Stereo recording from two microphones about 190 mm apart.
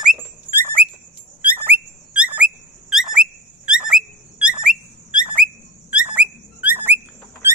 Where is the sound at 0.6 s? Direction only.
10° right (ahead or behind).